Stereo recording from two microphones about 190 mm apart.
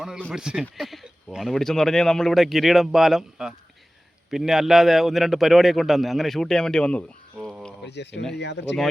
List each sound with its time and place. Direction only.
0.0 s speech: centre (ahead or behind)
7.9 s speech: 65° left (ahead or behind)